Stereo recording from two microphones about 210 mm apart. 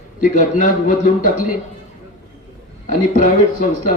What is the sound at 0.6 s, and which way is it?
Speech, 40° left (ahead or behind).